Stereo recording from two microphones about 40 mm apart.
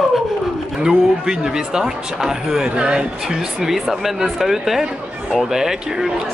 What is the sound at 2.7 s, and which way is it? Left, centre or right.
Speech, right.